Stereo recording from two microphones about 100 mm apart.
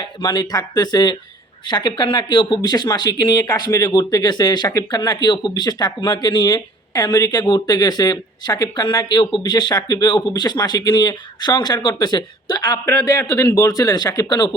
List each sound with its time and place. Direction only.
0.0 s speech: 45° left (ahead or behind)
13.0 s speech: 30° left (ahead or behind)